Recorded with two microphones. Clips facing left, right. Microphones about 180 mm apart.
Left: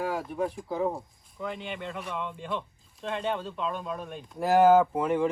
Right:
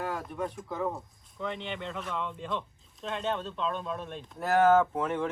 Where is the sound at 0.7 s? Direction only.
30° left (ahead or behind).